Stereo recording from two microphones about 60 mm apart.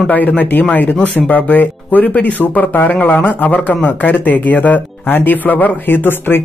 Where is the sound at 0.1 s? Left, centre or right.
Left.